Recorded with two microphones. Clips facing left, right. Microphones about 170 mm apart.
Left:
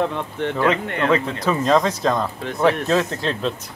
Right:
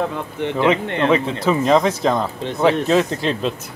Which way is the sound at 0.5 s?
15° right (ahead or behind).